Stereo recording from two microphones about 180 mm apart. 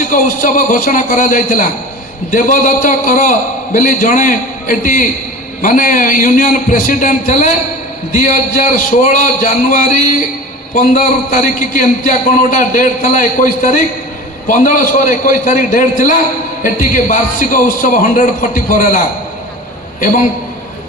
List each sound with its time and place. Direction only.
0.0 s a man's voice: 50° left (ahead or behind)